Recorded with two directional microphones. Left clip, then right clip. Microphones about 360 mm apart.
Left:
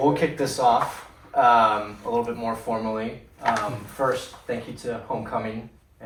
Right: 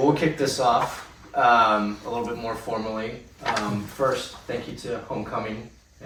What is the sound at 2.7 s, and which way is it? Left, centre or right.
Speech, left.